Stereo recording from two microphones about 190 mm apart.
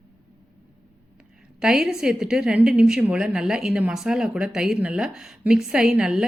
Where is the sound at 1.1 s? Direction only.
5° right (ahead or behind).